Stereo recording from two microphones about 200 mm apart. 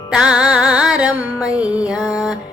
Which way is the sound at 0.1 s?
5° right (ahead or behind).